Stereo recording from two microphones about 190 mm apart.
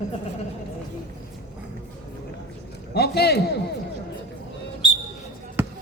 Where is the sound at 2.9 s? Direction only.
60° left (ahead or behind).